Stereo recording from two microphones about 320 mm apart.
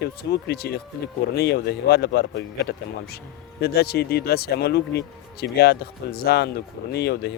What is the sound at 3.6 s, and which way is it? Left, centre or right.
Speech, left.